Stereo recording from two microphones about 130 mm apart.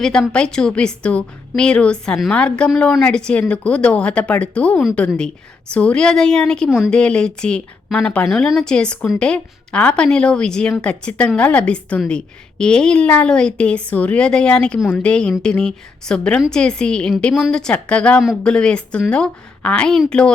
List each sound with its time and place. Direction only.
0.0 s a woman's voice: 5° left (ahead or behind)
6.7 s a woman's voice: 5° right (ahead or behind)
6.9 s a woman's voice: 5° left (ahead or behind)